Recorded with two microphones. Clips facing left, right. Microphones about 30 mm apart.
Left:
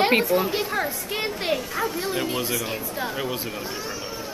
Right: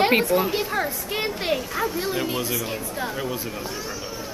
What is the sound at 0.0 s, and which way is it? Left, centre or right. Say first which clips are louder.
A woman's voice: right 1 dB; centre.